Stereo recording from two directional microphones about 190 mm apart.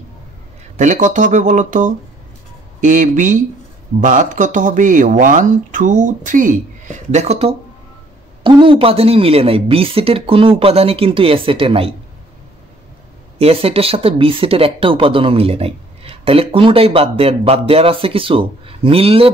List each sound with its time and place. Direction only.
0.7 s speech: 40° right (ahead or behind)
8.5 s speech: 25° right (ahead or behind)
13.4 s speech: 30° right (ahead or behind)